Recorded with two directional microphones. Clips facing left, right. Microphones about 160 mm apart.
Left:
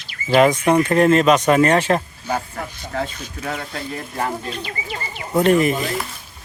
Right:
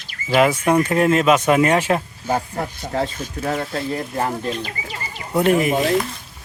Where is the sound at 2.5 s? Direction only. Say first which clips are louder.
Right 3 dB; 35° right (ahead or behind).